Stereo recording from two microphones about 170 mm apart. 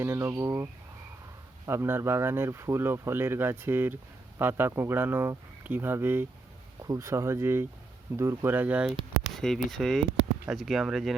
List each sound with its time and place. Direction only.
0.0 s speech: 15° right (ahead or behind)
9.6 s speech: centre (ahead or behind)